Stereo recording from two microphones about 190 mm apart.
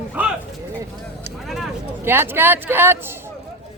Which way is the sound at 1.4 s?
Centre (ahead or behind).